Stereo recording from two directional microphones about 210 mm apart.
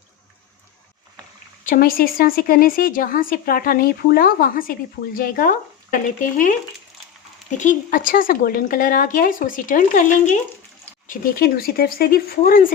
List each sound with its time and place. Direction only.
1.6 s a woman's voice: 45° left (ahead or behind)
7.6 s a woman's voice: 40° left (ahead or behind)